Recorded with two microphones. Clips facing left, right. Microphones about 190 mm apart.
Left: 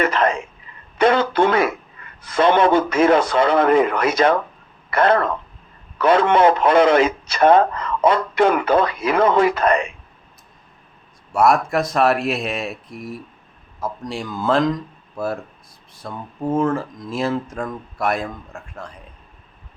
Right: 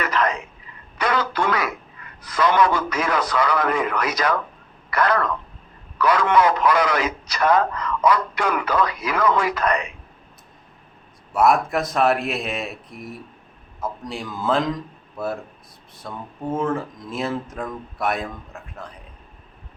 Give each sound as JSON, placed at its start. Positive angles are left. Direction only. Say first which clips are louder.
{"t": 0.0, "sound": "a woman's voice", "louder": "left 4 dB", "side_deg": 25}
{"t": 11.3, "sound": "speech", "louder": "left 2 dB", "side_deg": 0}